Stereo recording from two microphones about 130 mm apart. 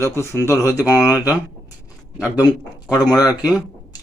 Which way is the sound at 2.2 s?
10° right (ahead or behind).